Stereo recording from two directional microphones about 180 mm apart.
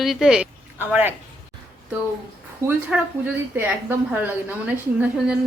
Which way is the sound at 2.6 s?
15° right (ahead or behind).